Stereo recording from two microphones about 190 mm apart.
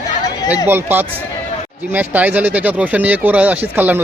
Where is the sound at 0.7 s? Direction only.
10° right (ahead or behind).